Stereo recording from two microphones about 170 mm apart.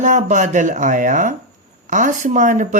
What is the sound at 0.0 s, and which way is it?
Speech, 45° right (ahead or behind).